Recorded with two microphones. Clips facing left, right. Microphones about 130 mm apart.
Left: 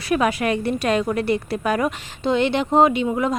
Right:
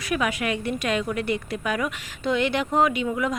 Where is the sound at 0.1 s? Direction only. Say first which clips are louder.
Left 6 dB; 35° left (ahead or behind).